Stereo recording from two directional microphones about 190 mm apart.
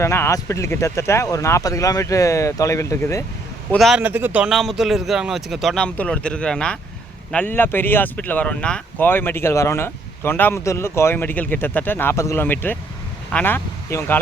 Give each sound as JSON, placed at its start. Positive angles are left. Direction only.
{"t": 0.0, "sound": "speech", "side_deg": 15}
{"t": 3.7, "sound": "a man's voice", "side_deg": 0}